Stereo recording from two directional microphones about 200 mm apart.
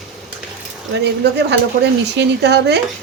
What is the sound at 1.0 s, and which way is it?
Speech, 55° right (ahead or behind).